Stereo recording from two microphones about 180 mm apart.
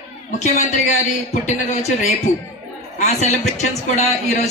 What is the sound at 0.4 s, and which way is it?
A man's voice, 40° left (ahead or behind).